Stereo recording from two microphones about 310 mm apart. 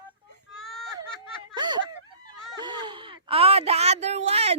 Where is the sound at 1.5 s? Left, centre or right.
Centre.